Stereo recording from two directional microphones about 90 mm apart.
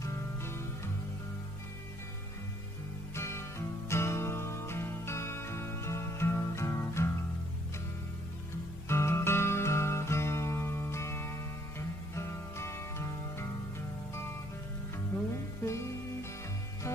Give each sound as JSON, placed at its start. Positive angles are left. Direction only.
{"t": 0.0, "sound": "music", "side_deg": 30}
{"t": 3.2, "sound": "music", "side_deg": 30}
{"t": 8.8, "sound": "music", "side_deg": 30}
{"t": 15.6, "sound": "music", "side_deg": 30}